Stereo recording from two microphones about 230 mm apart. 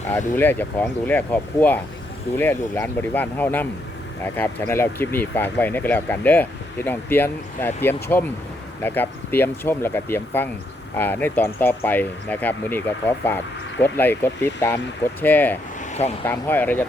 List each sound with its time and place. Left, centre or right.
0.3 s speech: centre
15.9 s speech: left
16.2 s speech: centre